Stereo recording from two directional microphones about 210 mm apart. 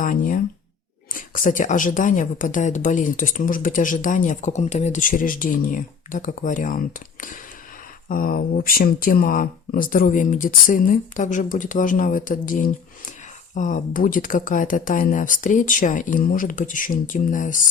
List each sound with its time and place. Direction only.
0.0 s speech: 40° left (ahead or behind)